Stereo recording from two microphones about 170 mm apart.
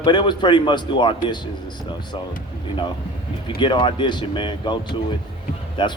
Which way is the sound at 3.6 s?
30° left (ahead or behind).